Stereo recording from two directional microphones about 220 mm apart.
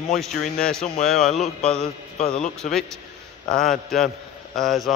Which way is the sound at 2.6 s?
40° left (ahead or behind).